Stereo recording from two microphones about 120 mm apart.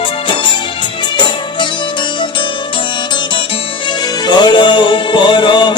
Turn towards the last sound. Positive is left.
turn(degrees=40)  # may be behind; listen again after turning